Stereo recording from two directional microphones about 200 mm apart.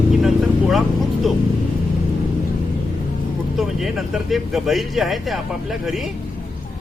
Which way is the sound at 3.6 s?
Centre (ahead or behind).